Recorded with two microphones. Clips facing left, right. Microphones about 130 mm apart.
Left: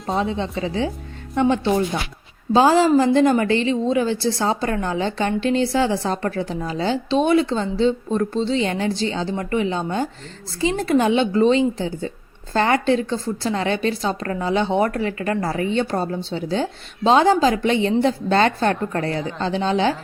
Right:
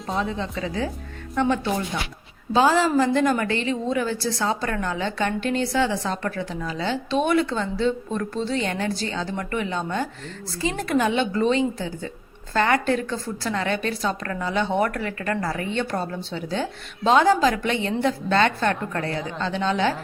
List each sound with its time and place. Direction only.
0.1 s a woman's voice: 30° left (ahead or behind)